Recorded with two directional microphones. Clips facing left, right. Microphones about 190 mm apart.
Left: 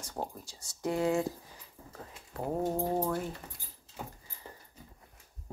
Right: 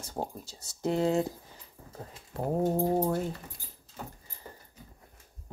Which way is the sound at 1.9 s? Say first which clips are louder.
Right 3 dB; 30° right (ahead or behind).